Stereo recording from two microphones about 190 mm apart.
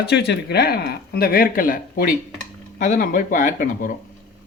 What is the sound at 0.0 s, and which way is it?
Speech, 65° left (ahead or behind).